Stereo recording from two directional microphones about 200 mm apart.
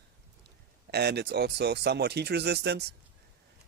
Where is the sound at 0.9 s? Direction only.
55° right (ahead or behind).